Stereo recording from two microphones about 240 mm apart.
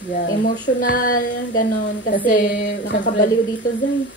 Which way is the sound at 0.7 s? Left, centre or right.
Left.